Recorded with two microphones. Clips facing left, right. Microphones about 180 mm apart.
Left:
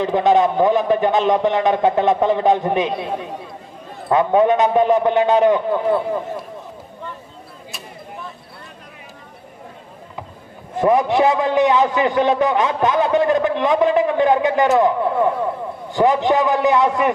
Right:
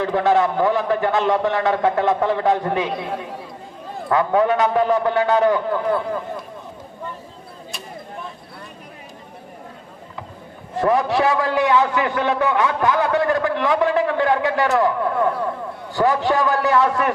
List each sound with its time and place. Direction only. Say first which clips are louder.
0.0 s a man's voice: left 2 dB; 20° left (ahead or behind)
4.1 s a man's voice: left 3 dB; 20° left (ahead or behind)
10.8 s a man's voice: left 3 dB; 20° left (ahead or behind)